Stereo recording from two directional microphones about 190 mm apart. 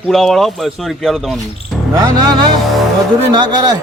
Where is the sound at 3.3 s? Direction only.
20° right (ahead or behind).